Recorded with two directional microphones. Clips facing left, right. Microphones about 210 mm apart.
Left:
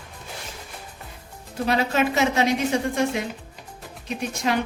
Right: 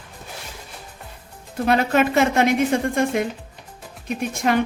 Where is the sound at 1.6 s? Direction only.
55° right (ahead or behind).